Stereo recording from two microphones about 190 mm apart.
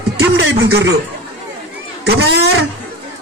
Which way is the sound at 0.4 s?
65° right (ahead or behind).